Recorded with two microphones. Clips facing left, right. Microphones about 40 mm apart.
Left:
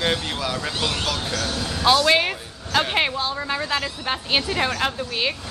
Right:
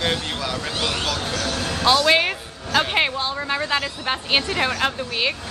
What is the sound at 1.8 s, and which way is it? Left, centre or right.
Speech, centre.